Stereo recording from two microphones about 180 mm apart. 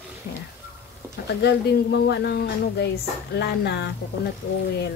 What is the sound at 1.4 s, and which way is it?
A woman's voice, 70° left (ahead or behind).